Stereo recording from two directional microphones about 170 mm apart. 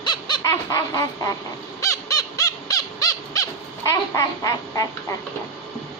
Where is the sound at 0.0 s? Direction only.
25° left (ahead or behind).